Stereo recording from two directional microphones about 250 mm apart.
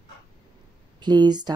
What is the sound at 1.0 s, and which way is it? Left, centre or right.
Speech, centre.